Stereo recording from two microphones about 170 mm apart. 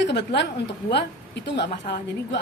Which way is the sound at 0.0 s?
80° left.